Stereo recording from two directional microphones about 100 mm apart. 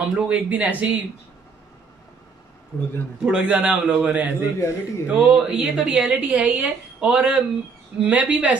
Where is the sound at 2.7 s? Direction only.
35° left (ahead or behind).